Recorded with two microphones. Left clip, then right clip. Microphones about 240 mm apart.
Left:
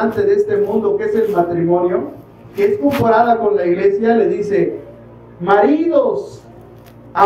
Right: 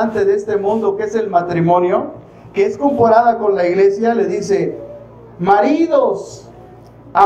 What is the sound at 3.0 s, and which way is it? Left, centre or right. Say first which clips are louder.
A man's voice: right 2 dB; right.